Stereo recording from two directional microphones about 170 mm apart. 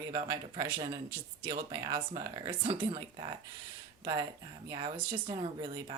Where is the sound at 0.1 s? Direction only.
30° right (ahead or behind).